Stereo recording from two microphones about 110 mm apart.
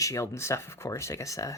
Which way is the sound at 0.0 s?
30° left (ahead or behind).